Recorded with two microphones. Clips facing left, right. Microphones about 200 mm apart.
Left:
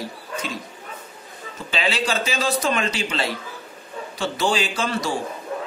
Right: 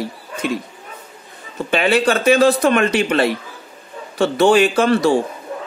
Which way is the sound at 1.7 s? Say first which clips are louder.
Right 8 dB; 60° right (ahead or behind).